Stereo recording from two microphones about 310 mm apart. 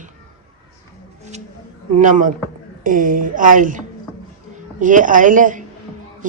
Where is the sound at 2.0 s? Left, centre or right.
Right.